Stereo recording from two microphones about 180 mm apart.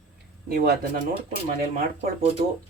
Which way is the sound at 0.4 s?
55° right (ahead or behind).